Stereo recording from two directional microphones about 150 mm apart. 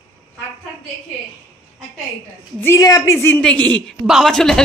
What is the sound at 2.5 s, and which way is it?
A woman's voice, 15° left (ahead or behind).